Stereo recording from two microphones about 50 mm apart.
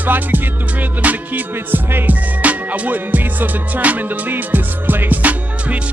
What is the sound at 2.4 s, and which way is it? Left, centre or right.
Music, right.